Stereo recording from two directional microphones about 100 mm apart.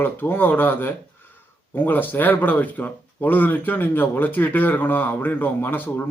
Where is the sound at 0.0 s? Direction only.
20° left (ahead or behind).